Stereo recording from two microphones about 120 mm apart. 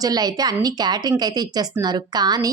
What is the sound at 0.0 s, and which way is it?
A woman's voice, 35° right (ahead or behind).